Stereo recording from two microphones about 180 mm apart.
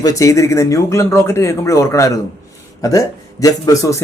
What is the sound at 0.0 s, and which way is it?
Speech, 20° left (ahead or behind).